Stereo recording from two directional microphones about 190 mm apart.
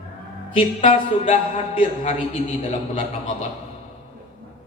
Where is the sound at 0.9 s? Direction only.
30° left (ahead or behind).